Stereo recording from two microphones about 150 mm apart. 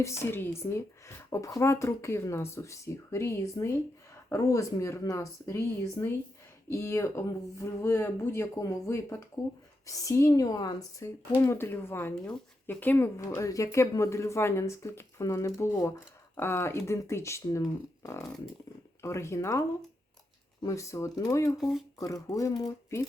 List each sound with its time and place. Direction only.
0.0 s speech: 15° left (ahead or behind)
18.0 s a sound: 20° left (ahead or behind)
19.0 s speech: 20° left (ahead or behind)
21.6 s speech: centre (ahead or behind)
22.0 s speech: 20° left (ahead or behind)